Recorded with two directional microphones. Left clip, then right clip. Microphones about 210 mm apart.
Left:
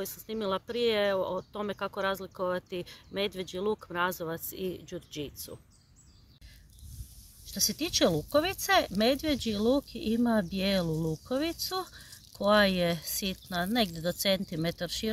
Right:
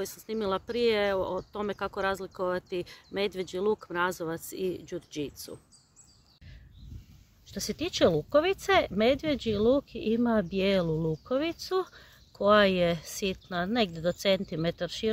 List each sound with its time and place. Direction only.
0.0 s speech: 30° right (ahead or behind)
7.5 s speech: 20° right (ahead or behind)